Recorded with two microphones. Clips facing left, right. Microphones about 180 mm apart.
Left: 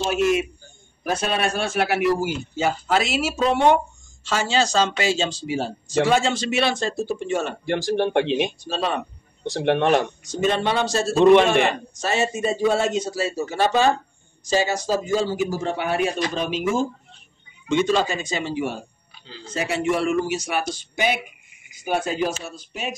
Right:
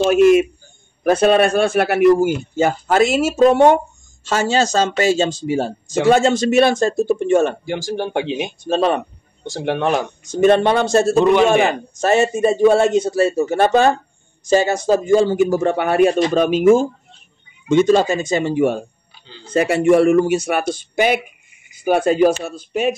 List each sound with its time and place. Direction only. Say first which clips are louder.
0.0 s a man's voice: right 9 dB; 55° right (ahead or behind)
7.6 s speech: left 1 dB; centre (ahead or behind)
8.6 s a man's voice: right 8 dB; 55° right (ahead or behind)
9.4 s speech: even; centre (ahead or behind)
10.2 s a man's voice: right 9 dB; 50° right (ahead or behind)